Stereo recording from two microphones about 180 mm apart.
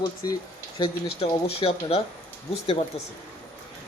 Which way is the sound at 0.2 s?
20° left (ahead or behind).